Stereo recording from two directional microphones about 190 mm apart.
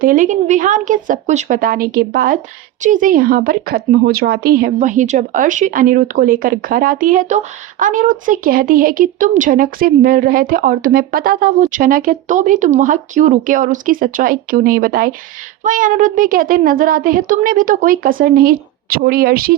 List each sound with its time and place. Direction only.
0.0 s a woman's voice: 45° right (ahead or behind)